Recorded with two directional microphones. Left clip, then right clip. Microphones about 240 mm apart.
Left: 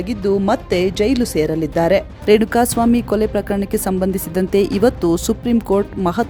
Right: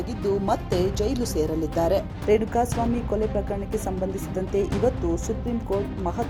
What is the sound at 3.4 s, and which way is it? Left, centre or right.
Speech, left.